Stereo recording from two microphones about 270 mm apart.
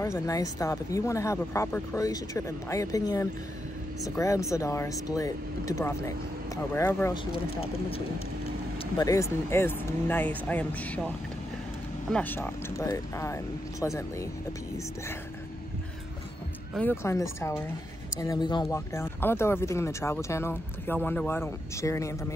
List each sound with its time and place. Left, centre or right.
0.0 s speech: centre
7.3 s speech: left; by 11.1 s centre
12.1 s speech: centre
16.7 s speech: centre